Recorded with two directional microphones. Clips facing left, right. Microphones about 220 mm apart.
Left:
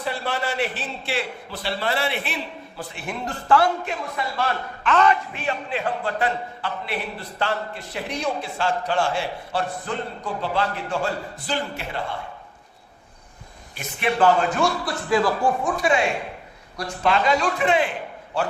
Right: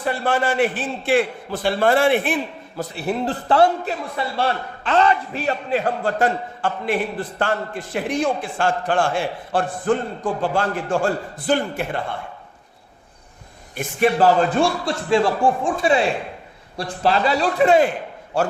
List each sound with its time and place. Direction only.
0.0 s a man's voice: 50° right (ahead or behind)
13.7 s a man's voice: 40° right (ahead or behind)